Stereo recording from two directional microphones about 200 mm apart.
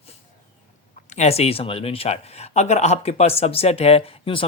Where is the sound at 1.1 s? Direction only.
35° left (ahead or behind).